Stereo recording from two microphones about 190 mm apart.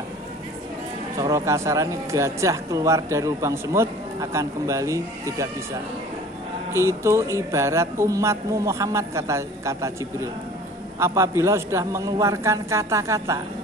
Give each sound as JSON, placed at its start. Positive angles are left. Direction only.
{"t": 1.1, "sound": "speech", "side_deg": -20}
{"t": 6.7, "sound": "speech", "side_deg": -15}